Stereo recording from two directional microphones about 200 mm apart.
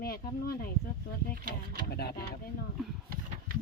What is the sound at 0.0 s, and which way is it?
Speech, 50° left (ahead or behind).